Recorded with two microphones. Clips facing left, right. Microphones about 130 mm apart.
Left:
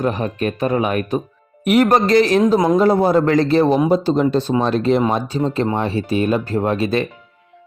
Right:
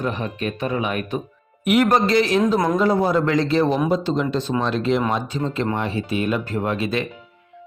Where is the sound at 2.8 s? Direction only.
35° left (ahead or behind).